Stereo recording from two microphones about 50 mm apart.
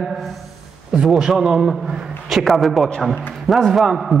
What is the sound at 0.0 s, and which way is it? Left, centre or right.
A woman's voice, centre.